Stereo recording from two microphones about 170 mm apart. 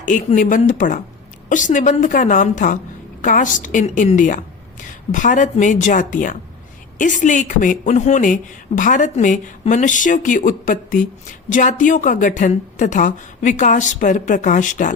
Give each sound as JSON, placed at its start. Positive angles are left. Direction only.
{"t": 0.0, "sound": "speech", "side_deg": 50}